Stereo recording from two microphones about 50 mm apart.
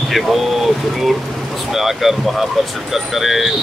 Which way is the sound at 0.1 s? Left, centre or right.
Centre.